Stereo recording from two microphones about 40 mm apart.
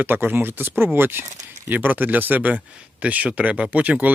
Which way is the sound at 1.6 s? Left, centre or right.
Right.